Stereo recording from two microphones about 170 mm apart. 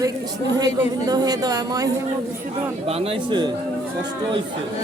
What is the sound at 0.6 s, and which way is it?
Speech, 20° right (ahead or behind).